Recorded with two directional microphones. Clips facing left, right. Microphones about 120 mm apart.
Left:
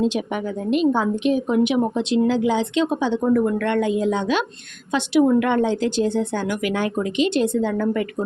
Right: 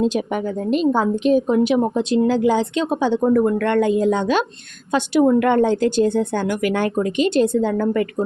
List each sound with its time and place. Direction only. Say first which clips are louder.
0.1 s a woman's voice: right 3 dB; 40° right (ahead or behind)